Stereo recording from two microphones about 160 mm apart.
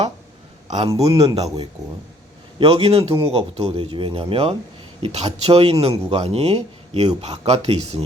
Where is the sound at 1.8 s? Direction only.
45° right (ahead or behind).